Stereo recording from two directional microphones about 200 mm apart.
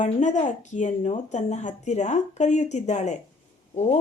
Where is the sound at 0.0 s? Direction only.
35° left (ahead or behind).